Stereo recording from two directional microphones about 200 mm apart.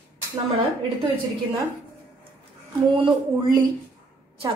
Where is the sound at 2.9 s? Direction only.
25° right (ahead or behind).